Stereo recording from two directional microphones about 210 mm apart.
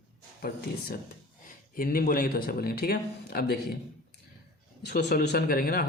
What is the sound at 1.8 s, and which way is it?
A man's voice, 40° left (ahead or behind).